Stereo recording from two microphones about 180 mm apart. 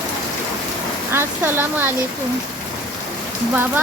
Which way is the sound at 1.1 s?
15° right (ahead or behind).